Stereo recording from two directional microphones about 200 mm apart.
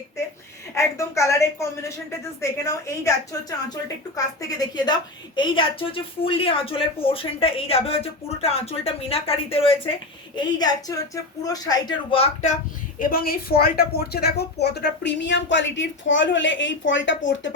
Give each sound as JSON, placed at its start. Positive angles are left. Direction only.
{"t": 0.7, "sound": "a woman's voice", "side_deg": 15}
{"t": 13.0, "sound": "a woman's voice", "side_deg": 45}